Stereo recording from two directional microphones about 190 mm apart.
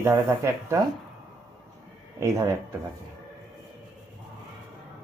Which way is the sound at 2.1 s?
15° right (ahead or behind).